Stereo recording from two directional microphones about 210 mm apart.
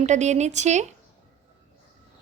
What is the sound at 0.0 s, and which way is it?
Speech, 35° right (ahead or behind).